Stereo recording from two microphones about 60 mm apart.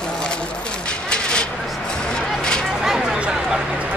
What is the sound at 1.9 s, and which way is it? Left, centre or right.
Music, centre.